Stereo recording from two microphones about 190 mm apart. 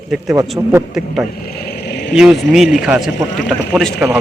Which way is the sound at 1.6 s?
60° left (ahead or behind).